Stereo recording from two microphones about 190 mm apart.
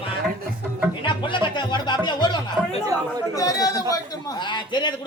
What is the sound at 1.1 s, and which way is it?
Music, 25° left (ahead or behind).